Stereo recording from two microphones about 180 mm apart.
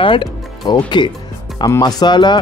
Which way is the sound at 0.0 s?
25° left (ahead or behind).